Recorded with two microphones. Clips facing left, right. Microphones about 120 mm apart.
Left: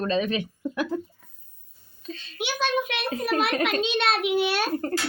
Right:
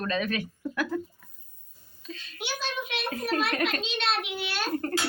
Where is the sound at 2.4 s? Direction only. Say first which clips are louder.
Left 8 dB; 65° left (ahead or behind).